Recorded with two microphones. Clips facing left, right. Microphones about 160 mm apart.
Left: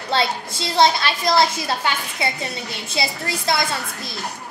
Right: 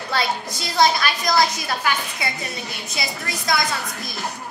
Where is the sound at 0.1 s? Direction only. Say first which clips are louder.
Left 2 dB; 25° left (ahead or behind).